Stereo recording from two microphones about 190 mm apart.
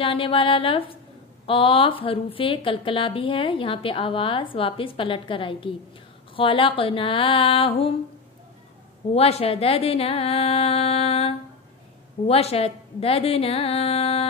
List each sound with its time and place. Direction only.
0.0 s a woman's voice: 30° left (ahead or behind)
9.1 s speech: 30° left (ahead or behind)